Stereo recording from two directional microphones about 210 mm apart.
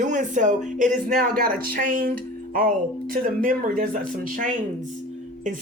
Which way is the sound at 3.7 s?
40° right (ahead or behind).